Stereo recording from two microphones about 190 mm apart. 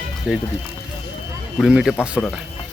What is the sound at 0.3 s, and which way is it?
Speech, centre (ahead or behind).